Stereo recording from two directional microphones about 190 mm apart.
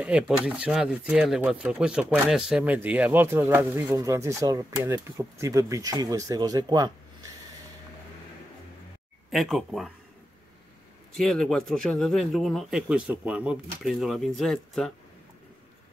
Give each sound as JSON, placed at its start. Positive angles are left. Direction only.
{"t": 0.0, "sound": "speech", "side_deg": -5}
{"t": 9.3, "sound": "speech", "side_deg": 0}
{"t": 11.1, "sound": "speech", "side_deg": 5}